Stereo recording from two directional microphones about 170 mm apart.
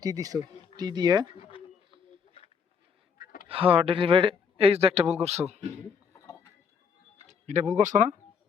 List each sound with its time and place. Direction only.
0.0 s speech: 20° right (ahead or behind)
1.4 s bird: 30° left (ahead or behind)
3.5 s speech: 35° right (ahead or behind)
7.3 s speech: 45° right (ahead or behind)